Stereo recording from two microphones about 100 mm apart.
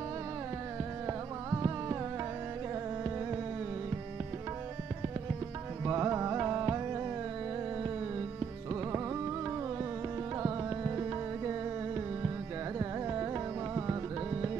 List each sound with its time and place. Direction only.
1.0 s music: 25° right (ahead or behind)
5.9 s music: 25° right (ahead or behind)
12.7 s carnatic music: 30° right (ahead or behind)